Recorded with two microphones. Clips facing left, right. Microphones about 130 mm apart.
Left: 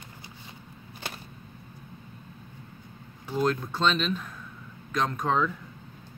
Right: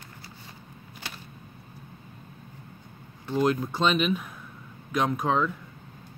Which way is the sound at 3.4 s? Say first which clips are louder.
Right 1 dB; 10° right (ahead or behind).